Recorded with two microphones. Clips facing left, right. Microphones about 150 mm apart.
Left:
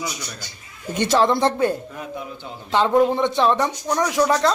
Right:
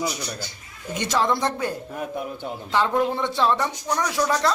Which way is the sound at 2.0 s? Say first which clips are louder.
Right 3 dB; 50° right (ahead or behind).